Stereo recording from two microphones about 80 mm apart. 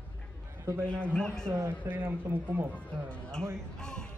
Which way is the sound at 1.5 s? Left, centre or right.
Right.